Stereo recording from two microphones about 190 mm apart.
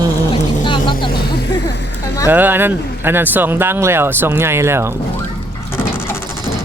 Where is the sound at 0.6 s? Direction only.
25° left (ahead or behind).